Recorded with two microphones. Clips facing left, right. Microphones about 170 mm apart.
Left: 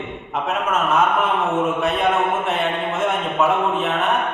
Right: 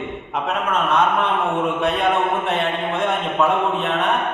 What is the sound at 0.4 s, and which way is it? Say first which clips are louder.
A man's voice: left 1 dB; 5° left (ahead or behind).